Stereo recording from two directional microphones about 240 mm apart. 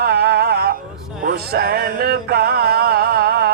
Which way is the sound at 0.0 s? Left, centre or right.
Right.